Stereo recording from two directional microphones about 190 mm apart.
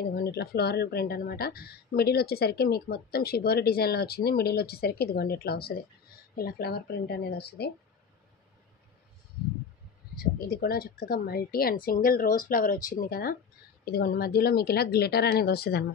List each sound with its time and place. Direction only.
0.0 s speech: 55° left (ahead or behind)
10.1 s speech: 55° left (ahead or behind)